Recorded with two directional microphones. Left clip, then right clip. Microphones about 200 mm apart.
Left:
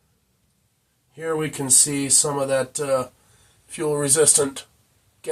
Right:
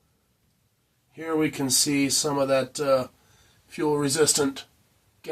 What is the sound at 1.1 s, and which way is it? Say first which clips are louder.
Speech: left 1 dB; centre (ahead or behind).